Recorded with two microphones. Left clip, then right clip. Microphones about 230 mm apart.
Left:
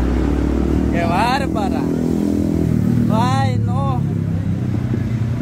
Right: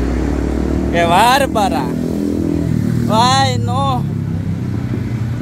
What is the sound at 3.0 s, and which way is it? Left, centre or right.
Vehicle, right.